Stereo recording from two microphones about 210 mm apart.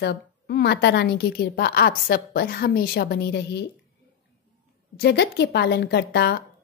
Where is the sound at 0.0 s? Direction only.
50° left (ahead or behind).